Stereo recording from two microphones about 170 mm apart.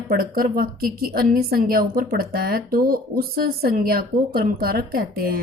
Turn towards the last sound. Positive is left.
turn(degrees=-60)  # may be behind; listen again after turning